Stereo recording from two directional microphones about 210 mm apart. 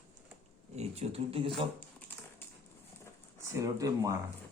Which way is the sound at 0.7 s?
30° right (ahead or behind).